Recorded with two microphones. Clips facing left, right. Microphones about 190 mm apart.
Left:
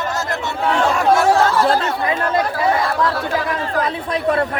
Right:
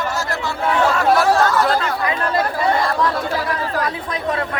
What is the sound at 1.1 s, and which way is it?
Speech, 30° left (ahead or behind).